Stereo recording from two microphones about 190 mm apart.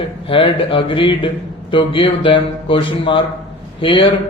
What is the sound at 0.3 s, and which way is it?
A man's voice, 30° left (ahead or behind).